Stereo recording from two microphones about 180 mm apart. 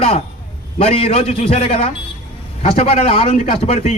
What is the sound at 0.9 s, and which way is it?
A man's voice, 30° left (ahead or behind).